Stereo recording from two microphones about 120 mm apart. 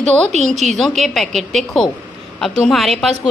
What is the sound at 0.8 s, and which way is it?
Speech, centre (ahead or behind).